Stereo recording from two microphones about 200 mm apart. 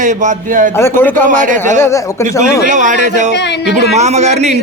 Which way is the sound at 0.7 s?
10° left (ahead or behind).